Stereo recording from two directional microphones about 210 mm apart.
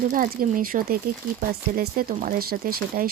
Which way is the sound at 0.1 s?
40° right (ahead or behind).